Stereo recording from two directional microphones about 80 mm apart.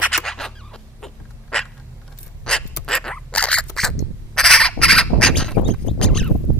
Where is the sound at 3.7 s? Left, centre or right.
Centre.